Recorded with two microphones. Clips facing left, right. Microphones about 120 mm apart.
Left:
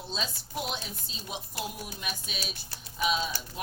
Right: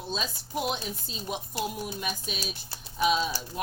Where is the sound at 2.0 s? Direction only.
45° right (ahead or behind).